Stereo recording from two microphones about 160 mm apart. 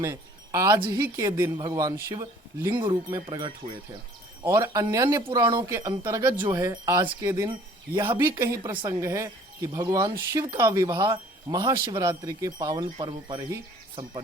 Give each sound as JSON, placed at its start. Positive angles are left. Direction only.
{"t": 0.0, "sound": "a woman's voice", "side_deg": -15}
{"t": 2.7, "sound": "speech", "side_deg": -30}
{"t": 8.0, "sound": "speech", "side_deg": -30}
{"t": 8.8, "sound": "speech", "side_deg": -15}